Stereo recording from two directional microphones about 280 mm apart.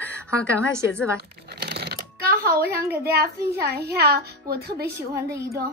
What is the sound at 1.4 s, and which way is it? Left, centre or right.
Shuffling cards, right.